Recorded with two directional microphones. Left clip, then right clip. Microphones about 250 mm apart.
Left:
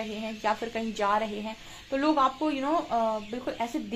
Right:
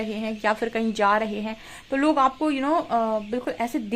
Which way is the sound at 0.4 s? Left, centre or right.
Right.